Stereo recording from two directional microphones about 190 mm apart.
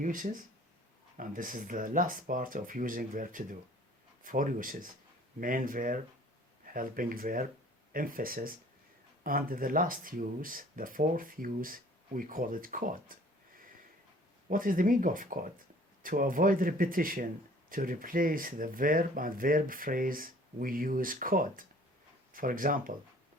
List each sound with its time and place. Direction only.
0.0 s speech: 45° right (ahead or behind)
14.5 s speech: 45° right (ahead or behind)